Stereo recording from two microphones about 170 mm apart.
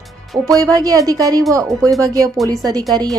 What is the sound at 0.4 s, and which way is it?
Speech, 20° right (ahead or behind).